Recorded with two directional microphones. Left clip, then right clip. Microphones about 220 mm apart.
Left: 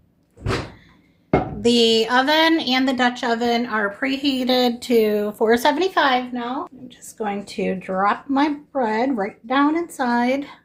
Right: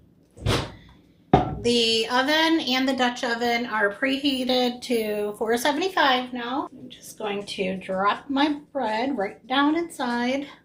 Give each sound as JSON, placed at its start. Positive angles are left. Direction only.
{"t": 1.6, "sound": "a woman's voice", "side_deg": 55}